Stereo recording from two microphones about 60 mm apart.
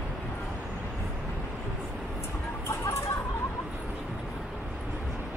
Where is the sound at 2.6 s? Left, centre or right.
Left.